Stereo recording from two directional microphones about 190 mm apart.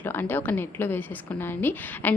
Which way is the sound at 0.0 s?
10° left (ahead or behind).